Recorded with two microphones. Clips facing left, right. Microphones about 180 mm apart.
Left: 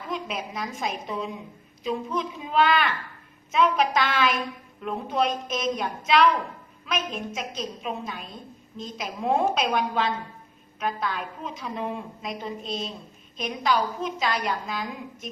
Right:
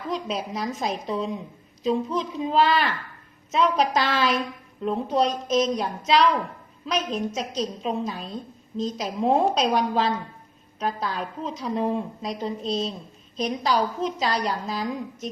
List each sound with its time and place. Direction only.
0.3 s a woman's voice: 30° right (ahead or behind)